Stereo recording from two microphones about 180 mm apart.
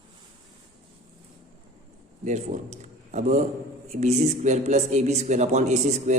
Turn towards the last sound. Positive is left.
turn(degrees=-40)  # may be behind; listen again after turning